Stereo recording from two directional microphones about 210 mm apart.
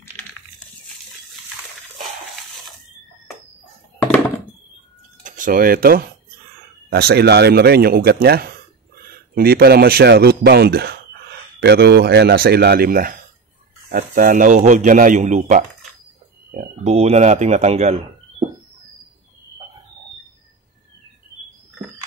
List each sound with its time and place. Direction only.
5.2 s speech: 40° right (ahead or behind)